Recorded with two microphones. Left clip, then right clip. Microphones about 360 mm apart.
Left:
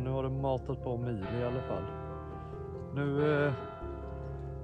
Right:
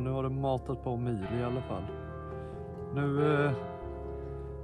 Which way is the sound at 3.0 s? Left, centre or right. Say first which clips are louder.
Right 1 dB; centre.